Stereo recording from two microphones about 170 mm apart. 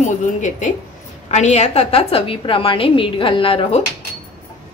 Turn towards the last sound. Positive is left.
turn(degrees=30)  # may be behind; listen again after turning